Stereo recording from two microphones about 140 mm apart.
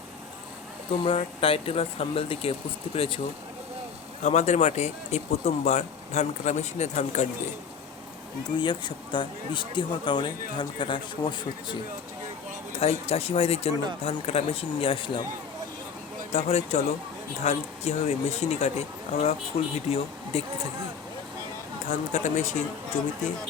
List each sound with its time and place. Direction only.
0.9 s speech: 40° left (ahead or behind)
4.2 s speech: 55° left (ahead or behind)
8.5 s speech: 35° left (ahead or behind)
12.8 s speech: 45° left (ahead or behind)
16.3 s speech: 50° left (ahead or behind)
21.8 s speech: 60° left (ahead or behind)